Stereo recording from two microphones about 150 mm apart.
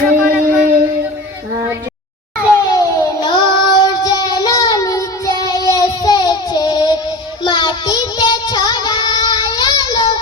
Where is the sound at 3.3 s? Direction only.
30° left (ahead or behind).